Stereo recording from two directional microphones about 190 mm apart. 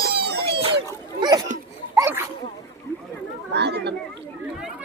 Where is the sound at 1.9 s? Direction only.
15° right (ahead or behind).